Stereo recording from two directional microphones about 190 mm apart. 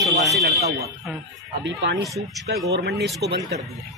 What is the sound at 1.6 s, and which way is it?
Speech, 65° right (ahead or behind).